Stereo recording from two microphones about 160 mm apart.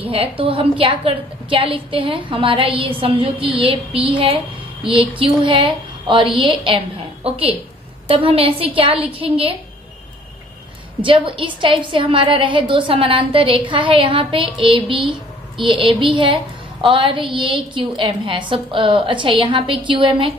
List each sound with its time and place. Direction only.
0.0 s a woman's voice: 35° right (ahead or behind)
11.0 s a woman's voice: 30° right (ahead or behind)